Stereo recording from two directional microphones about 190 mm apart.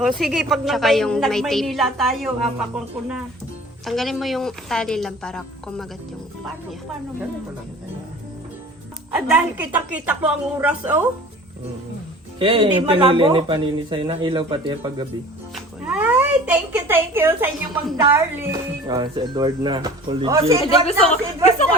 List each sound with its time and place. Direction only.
0.2 s a woman's voice: centre (ahead or behind)
9.1 s a woman's voice: 10° right (ahead or behind)
12.4 s speech: 25° right (ahead or behind)
15.9 s speech: 5° right (ahead or behind)
20.8 s a woman's voice: 35° left (ahead or behind)